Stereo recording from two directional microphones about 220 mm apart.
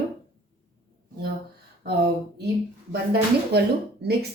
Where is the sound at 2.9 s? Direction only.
45° right (ahead or behind).